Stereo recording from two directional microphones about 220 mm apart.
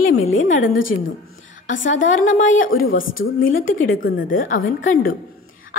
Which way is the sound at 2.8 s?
65° left (ahead or behind).